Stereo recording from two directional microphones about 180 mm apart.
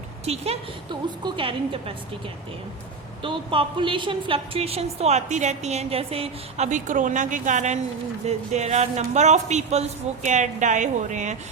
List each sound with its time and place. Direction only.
0.3 s a woman's voice: 35° right (ahead or behind)
3.2 s a woman's voice: 30° right (ahead or behind)